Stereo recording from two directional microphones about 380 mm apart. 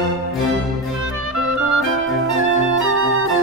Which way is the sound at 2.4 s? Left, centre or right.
Right.